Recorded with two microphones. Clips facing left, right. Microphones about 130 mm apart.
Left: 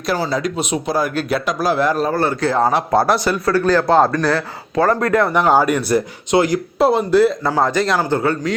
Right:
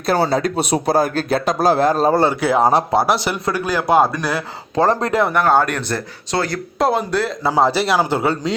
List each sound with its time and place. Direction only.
0.3 s speech: 35° right (ahead or behind)
2.1 s a man's voice: 15° right (ahead or behind)
4.7 s speech: 25° right (ahead or behind)
5.3 s speech: 15° left (ahead or behind)
6.7 s a man's voice: 5° left (ahead or behind)
7.5 s a man's voice: 10° right (ahead or behind)